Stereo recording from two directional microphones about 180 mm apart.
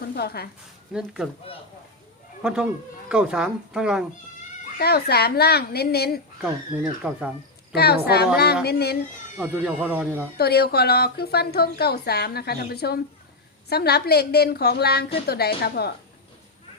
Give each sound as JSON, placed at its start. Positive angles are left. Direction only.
{"t": 0.2, "sound": "a woman's voice", "side_deg": 60}
{"t": 0.9, "sound": "speech", "side_deg": -5}
{"t": 2.4, "sound": "speech", "side_deg": -5}
{"t": 4.8, "sound": "a woman's voice", "side_deg": 60}
{"t": 6.7, "sound": "speech", "side_deg": -10}
{"t": 7.7, "sound": "a woman's voice", "side_deg": 60}
{"t": 9.4, "sound": "speech", "side_deg": -10}
{"t": 10.3, "sound": "a woman's voice", "side_deg": 60}